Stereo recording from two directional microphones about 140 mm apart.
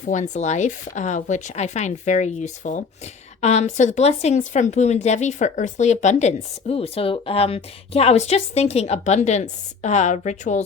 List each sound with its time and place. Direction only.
0.0 s speech: 60° left (ahead or behind)